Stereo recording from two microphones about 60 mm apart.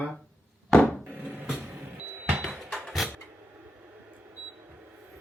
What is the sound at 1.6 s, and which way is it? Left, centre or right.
Music, right.